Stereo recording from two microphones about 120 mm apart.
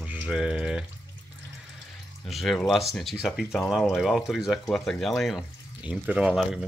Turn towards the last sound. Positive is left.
turn(degrees=-5)  # may be behind; listen again after turning